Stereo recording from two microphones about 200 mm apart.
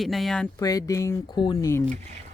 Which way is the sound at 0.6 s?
20° left (ahead or behind).